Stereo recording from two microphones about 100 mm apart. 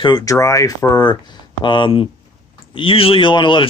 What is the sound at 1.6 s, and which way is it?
Speech, 55° left (ahead or behind).